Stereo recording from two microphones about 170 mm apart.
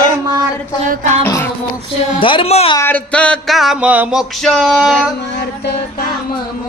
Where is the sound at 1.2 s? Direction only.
15° left (ahead or behind).